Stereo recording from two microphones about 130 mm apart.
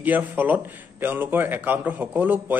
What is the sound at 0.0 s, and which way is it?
A man's voice, 15° right (ahead or behind).